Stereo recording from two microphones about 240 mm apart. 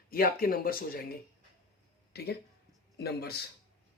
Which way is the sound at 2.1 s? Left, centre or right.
Left.